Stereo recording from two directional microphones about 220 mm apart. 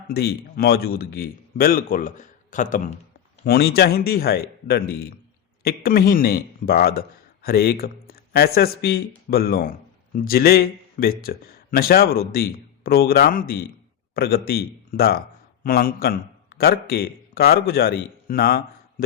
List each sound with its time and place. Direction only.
0.1 s a man's voice: 45° left (ahead or behind)